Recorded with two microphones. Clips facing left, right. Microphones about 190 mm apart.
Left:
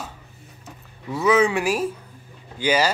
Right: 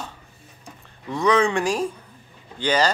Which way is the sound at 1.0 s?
5° left (ahead or behind).